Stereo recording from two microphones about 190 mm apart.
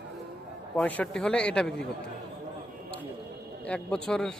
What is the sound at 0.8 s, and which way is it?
Speech, 5° left (ahead or behind).